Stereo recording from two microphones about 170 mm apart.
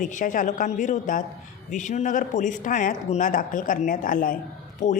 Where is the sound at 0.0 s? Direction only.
50° left (ahead or behind).